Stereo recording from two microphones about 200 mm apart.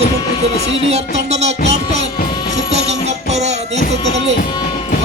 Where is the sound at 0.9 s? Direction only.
35° right (ahead or behind).